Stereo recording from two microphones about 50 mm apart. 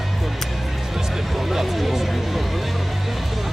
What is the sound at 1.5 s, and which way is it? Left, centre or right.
Speech, centre.